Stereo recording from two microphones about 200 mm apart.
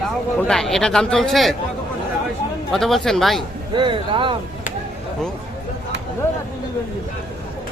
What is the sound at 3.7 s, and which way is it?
Speech, 25° right (ahead or behind).